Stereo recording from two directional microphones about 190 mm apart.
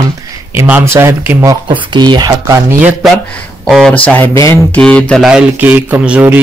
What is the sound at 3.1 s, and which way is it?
Speech, 5° left (ahead or behind).